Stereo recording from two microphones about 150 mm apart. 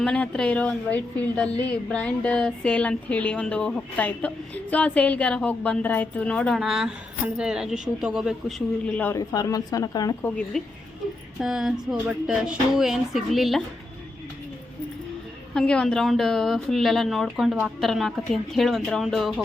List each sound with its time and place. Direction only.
0.0 s a woman's voice: 5° left (ahead or behind)
9.1 s speech: 25° left (ahead or behind)
10.2 s a woman's voice: 10° left (ahead or behind)
11.3 s a woman's voice: 5° right (ahead or behind)
15.5 s a woman's voice: 5° left (ahead or behind)